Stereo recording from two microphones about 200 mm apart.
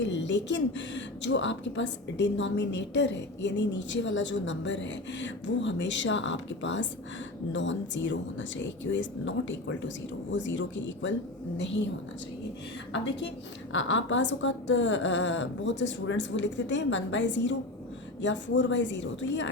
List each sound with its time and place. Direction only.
0.0 s speech: 60° left (ahead or behind)
12.9 s speech: 65° left (ahead or behind)